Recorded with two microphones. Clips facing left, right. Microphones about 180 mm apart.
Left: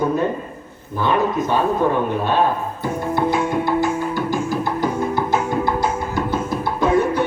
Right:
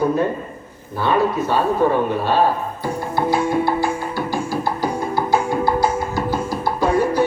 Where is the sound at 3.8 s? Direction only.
20° left (ahead or behind).